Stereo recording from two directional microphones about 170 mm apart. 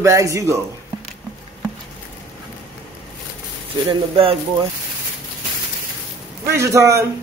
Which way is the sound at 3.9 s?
30° right (ahead or behind).